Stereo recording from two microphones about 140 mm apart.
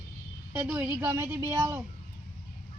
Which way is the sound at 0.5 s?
15° right (ahead or behind).